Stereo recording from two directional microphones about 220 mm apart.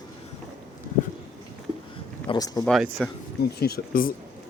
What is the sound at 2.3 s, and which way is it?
Speech, 15° left (ahead or behind).